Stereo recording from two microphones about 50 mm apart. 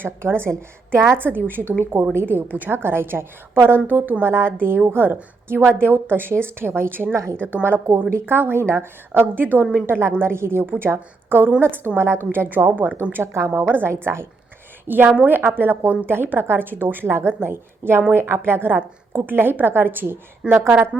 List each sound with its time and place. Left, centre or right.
0.0 s a woman's voice: right
2.7 s a woman's voice: right
3.8 s a woman's voice: right
4.3 s a woman's voice: right
9.8 s a woman's voice: right
11.9 s a woman's voice: right
12.3 s a woman's voice: right
13.2 s a woman's voice: right
14.0 s a woman's voice: right
14.8 s a woman's voice: right